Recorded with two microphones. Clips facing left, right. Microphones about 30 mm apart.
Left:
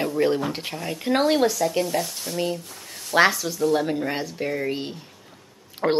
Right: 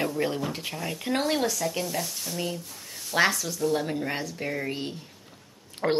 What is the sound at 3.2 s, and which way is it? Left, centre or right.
Speech, left.